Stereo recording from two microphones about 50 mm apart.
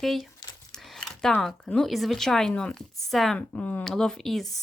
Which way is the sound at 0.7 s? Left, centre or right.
Centre.